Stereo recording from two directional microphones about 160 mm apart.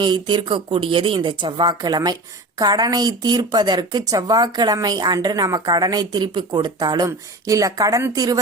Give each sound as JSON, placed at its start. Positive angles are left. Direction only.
{"t": 0.0, "sound": "a woman's voice", "side_deg": -30}